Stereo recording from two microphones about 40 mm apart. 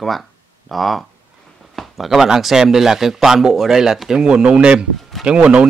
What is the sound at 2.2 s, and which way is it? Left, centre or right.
Speech, centre.